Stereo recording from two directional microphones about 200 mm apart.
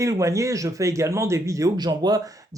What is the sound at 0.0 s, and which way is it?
Speech, 15° right (ahead or behind).